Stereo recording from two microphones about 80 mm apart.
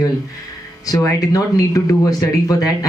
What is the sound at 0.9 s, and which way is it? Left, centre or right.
Speech, left.